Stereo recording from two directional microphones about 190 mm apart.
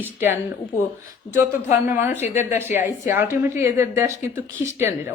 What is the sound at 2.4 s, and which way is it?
Speech, 10° right (ahead or behind).